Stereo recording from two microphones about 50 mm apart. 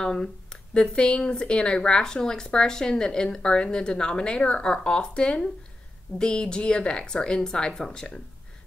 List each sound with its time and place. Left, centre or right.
0.0 s speech: centre